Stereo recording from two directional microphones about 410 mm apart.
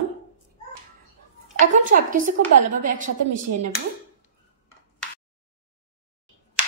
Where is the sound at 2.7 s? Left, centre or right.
Centre.